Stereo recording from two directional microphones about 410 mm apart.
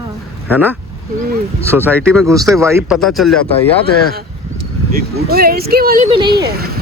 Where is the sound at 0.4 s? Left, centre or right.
Centre.